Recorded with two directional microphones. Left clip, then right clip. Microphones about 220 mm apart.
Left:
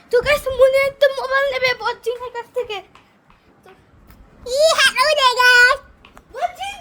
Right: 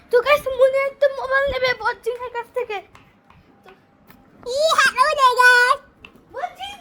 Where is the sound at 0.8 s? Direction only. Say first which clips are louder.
Left 3 dB; 30° left (ahead or behind).